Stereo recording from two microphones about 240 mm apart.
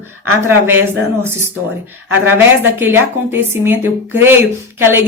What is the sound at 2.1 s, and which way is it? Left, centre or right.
A woman's voice, centre.